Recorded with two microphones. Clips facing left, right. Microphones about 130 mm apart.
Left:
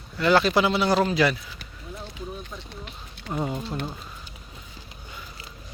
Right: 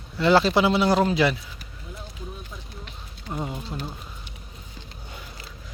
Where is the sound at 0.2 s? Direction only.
25° right (ahead or behind).